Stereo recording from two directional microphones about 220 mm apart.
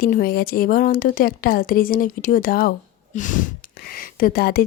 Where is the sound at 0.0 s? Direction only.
40° left (ahead or behind).